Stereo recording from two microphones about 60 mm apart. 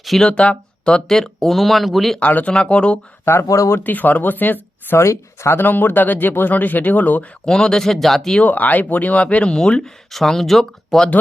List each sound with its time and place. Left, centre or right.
0.0 s speech: centre
0.3 s speech: centre
2.1 s speech: left
3.4 s speech: left
3.8 s speech: left
4.9 s speech: left
5.6 s speech: left
7.4 s speech: centre
8.4 s speech: left; by 11.1 s centre